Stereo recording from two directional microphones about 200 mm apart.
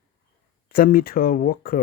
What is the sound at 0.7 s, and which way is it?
Speech, 45° left (ahead or behind).